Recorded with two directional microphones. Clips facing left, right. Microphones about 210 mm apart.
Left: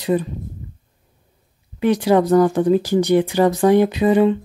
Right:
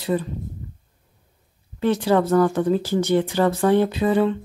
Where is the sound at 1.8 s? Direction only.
15° left (ahead or behind).